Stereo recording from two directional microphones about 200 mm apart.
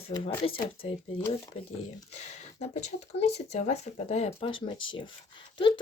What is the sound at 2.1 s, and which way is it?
Speech, 35° left (ahead or behind).